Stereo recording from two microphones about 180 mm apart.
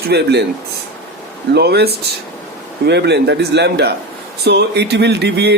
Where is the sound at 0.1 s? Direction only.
70° right (ahead or behind).